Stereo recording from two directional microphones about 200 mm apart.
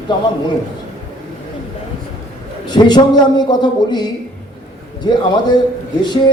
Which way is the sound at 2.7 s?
20° left (ahead or behind).